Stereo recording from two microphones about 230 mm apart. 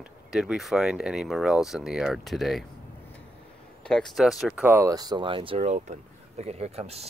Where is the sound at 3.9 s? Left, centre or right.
Centre; by 7.1 s right.